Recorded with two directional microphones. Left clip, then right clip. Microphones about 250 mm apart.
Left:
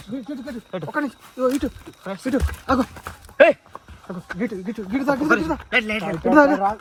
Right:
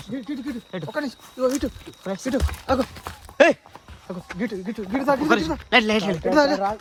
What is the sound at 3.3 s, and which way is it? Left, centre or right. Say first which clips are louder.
Speech: left 2 dB; centre.